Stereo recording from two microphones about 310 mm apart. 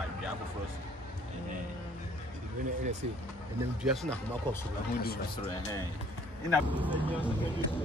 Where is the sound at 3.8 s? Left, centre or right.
Centre.